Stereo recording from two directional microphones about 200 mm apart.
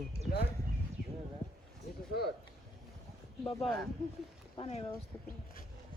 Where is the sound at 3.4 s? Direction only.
Centre (ahead or behind).